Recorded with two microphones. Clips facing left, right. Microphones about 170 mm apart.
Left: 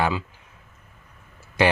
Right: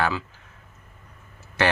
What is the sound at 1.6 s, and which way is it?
Speech, 15° left (ahead or behind).